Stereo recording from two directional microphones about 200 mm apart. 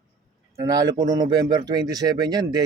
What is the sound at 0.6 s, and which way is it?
Speech, 15° right (ahead or behind).